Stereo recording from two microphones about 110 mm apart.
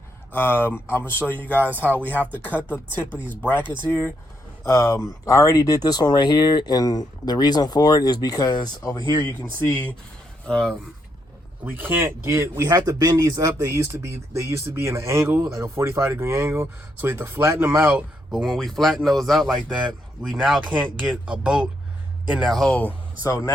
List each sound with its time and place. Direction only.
0.3 s speech: 20° left (ahead or behind)
2.0 s speech: 15° right (ahead or behind)
2.6 s speech: 20° left (ahead or behind)
3.0 s speech: 15° right (ahead or behind)
3.2 s speech: 15° left (ahead or behind)
4.6 s speech: 30° left (ahead or behind)
9.6 s speech: 15° left (ahead or behind)
10.4 s speech: 5° left (ahead or behind)
11.6 s speech: 15° right (ahead or behind)
12.7 s speech: 40° right (ahead or behind); by 18.0 s 20° right (ahead or behind)
18.3 s speech: centre (ahead or behind)
22.4 s speech: 5° left (ahead or behind)
23.2 s speech: 30° left (ahead or behind)